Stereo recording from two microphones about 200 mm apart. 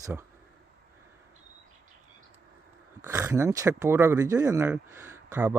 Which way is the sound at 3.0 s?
15° right (ahead or behind).